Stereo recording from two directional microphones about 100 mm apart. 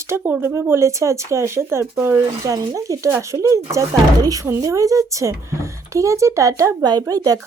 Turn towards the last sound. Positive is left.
turn(degrees=-40)  # may be behind; listen again after turning